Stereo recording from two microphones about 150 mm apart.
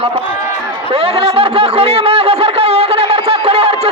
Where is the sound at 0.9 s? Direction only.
40° right (ahead or behind).